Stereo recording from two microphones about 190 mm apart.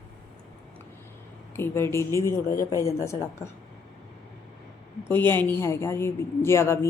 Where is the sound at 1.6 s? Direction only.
15° left (ahead or behind).